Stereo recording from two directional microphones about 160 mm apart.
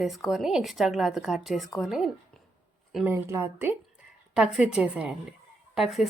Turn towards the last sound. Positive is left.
turn(degrees=0)  # may be behind; listen again after turning